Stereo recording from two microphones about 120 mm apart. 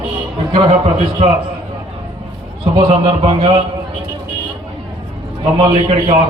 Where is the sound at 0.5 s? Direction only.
60° right (ahead or behind).